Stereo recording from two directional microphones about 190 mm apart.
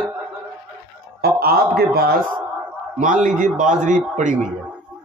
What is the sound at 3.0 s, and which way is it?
A man's voice, 40° right (ahead or behind).